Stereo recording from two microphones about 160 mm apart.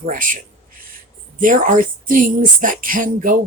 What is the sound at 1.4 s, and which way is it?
A woman's voice, 55° right (ahead or behind).